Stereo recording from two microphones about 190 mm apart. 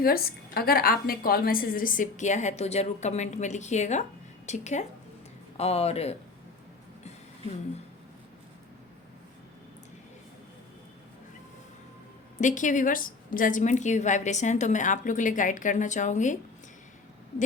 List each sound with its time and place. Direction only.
0.0 s a woman's voice: 50° left (ahead or behind); by 6.1 s 35° left (ahead or behind)
12.4 s a woman's voice: 40° left (ahead or behind)